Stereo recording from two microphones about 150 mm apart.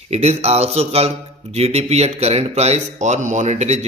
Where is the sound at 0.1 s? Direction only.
45° right (ahead or behind).